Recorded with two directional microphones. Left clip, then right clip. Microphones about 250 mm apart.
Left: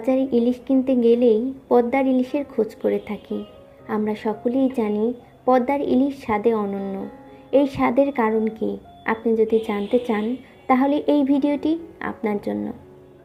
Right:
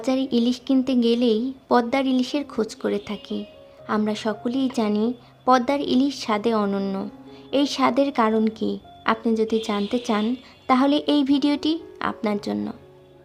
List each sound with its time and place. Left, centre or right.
0.0 s a woman's voice: centre